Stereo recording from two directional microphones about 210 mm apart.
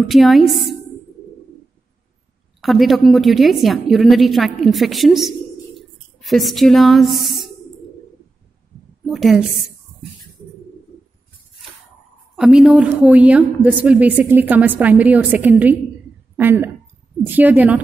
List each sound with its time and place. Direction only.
0.1 s a woman's voice: centre (ahead or behind)
2.6 s a woman's voice: centre (ahead or behind)
9.0 s a woman's voice: centre (ahead or behind)
12.4 s a woman's voice: 5° right (ahead or behind)